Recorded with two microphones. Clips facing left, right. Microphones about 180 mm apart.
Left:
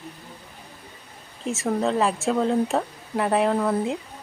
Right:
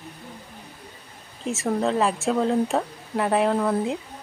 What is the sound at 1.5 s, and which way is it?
Speech, centre (ahead or behind).